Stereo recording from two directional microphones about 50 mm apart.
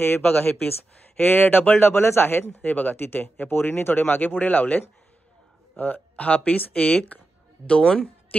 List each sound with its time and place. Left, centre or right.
0.0 s speech: left
2.6 s speech: left
7.6 s speech: centre